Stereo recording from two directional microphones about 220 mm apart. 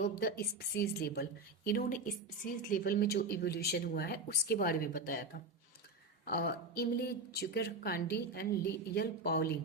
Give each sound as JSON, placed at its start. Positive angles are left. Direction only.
{"t": 0.0, "sound": "speech", "side_deg": 40}
{"t": 6.2, "sound": "speech", "side_deg": 45}